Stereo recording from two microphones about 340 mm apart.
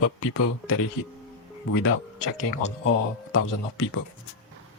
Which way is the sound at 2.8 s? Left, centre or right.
Left.